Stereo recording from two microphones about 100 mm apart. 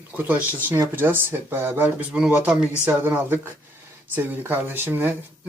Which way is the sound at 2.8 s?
20° right (ahead or behind).